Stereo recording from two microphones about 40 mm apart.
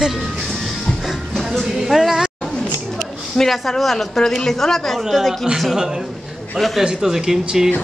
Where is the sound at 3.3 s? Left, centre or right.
Centre.